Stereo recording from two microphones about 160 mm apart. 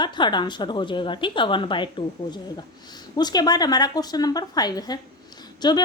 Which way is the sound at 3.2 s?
25° left (ahead or behind).